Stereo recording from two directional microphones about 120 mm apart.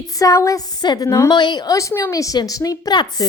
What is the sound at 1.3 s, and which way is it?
A woman's voice, 40° left (ahead or behind).